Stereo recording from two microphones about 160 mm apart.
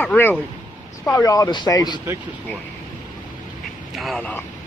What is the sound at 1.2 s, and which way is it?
Speech, 20° left (ahead or behind).